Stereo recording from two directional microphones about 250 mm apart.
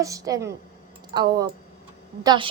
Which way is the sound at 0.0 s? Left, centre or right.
Centre.